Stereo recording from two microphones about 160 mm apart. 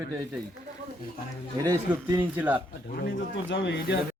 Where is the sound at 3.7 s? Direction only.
85° left.